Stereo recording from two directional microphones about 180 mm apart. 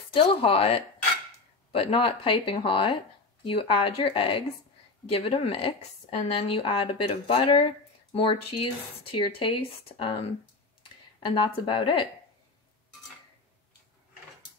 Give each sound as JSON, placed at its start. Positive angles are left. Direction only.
{"t": 0.1, "sound": "a woman's voice", "side_deg": 30}